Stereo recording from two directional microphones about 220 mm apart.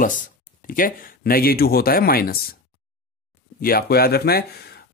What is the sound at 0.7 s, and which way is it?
Speech, 40° left (ahead or behind).